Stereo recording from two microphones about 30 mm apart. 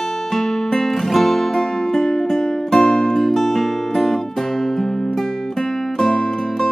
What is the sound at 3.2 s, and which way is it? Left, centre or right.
Music, centre.